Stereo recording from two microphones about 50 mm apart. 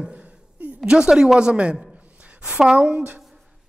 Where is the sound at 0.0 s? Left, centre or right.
Right.